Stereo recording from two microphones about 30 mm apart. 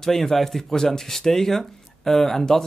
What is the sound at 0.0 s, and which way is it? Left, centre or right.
Speech, centre.